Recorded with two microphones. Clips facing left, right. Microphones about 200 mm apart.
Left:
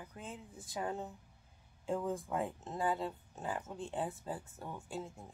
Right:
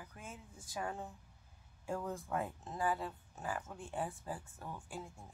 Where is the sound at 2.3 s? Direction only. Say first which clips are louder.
Left 2 dB; 15° left (ahead or behind).